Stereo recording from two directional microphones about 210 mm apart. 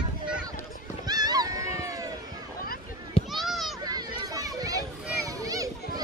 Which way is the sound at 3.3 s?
Centre (ahead or behind).